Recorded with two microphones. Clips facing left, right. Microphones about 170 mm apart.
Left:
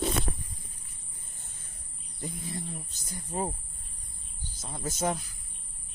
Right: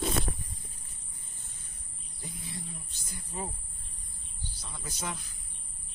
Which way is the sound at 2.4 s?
40° left (ahead or behind).